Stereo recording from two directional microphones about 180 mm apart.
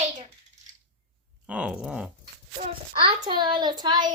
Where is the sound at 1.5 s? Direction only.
5° right (ahead or behind).